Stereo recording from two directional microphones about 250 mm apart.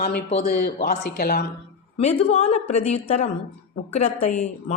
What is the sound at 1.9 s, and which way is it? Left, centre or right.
Speech, left.